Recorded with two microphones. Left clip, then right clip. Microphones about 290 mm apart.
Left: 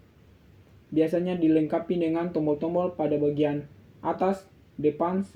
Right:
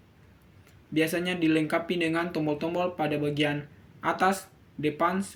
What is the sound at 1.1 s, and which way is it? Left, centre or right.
Speech, right.